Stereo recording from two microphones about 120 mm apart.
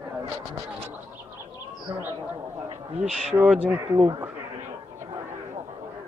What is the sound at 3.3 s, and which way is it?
Speech, 10° right (ahead or behind).